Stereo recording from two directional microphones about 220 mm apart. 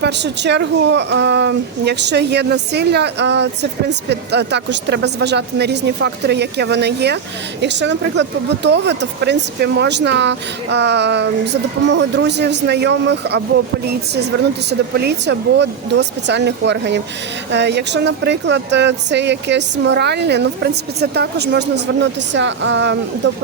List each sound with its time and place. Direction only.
0.0 s a woman's voice: 50° right (ahead or behind)